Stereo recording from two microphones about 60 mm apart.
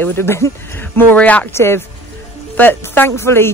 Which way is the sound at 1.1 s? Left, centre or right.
Left.